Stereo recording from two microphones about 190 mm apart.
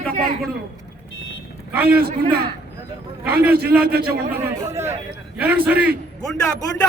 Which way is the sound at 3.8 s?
55° right (ahead or behind).